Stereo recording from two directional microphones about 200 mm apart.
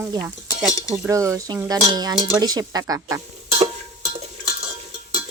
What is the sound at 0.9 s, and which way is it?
Cutlery, 15° right (ahead or behind).